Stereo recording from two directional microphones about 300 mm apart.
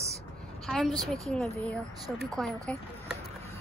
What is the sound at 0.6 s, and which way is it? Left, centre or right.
Speech, centre.